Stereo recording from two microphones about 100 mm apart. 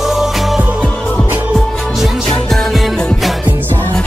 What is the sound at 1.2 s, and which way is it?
Music, 20° right (ahead or behind).